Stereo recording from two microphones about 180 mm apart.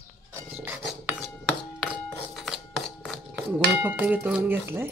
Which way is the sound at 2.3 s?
Centre (ahead or behind).